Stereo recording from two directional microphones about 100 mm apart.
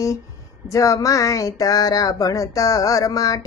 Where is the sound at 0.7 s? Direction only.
35° left (ahead or behind).